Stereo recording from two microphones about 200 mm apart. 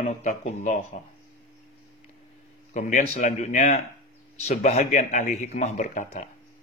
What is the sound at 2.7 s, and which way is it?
Speech, 40° left (ahead or behind).